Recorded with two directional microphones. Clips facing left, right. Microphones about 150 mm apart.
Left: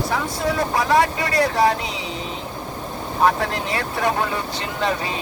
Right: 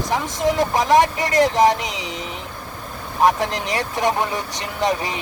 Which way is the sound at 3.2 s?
15° right (ahead or behind).